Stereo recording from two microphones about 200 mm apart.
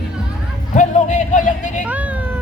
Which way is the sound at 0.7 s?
35° left (ahead or behind).